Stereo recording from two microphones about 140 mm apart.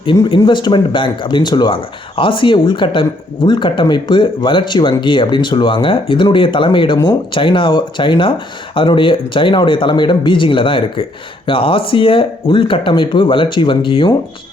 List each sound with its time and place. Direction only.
0.0 s speech: 35° left (ahead or behind)